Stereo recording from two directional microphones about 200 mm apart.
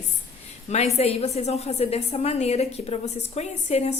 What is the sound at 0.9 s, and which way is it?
A woman's voice, 30° left (ahead or behind).